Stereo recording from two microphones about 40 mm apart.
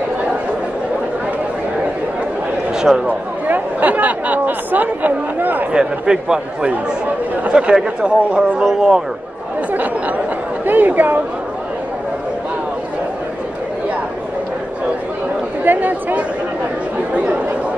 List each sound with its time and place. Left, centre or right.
2.7 s a sound: centre
3.1 s speech: right
5.7 s a man's voice: right
9.7 s chatter: right
10.6 s speech: right
15.6 s a sound: right
17.1 s chatter: right